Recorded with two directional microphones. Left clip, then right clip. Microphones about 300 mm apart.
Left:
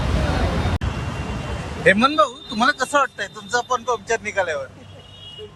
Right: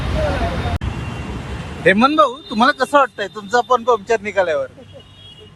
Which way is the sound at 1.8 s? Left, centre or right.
Centre.